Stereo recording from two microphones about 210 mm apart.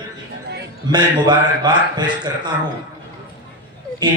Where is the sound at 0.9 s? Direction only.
20° right (ahead or behind).